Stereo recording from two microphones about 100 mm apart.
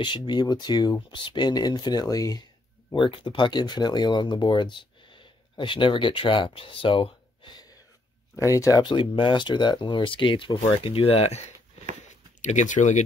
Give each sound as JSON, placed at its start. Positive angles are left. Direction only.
{"t": 0.0, "sound": "speech", "side_deg": 50}
{"t": 2.9, "sound": "speech", "side_deg": 55}
{"t": 8.4, "sound": "speech", "side_deg": 30}
{"t": 8.8, "sound": "speech", "side_deg": 55}